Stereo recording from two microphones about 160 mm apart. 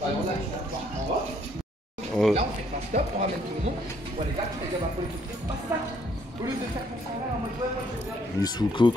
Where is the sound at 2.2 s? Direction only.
5° left (ahead or behind).